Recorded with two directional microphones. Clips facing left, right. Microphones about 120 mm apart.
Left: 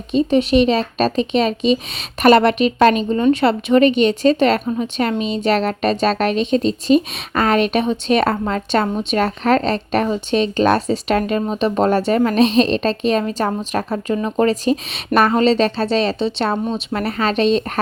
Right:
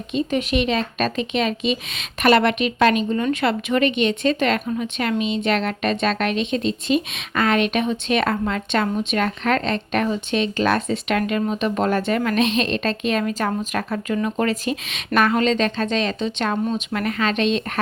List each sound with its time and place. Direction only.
0.1 s speech: 35° left (ahead or behind)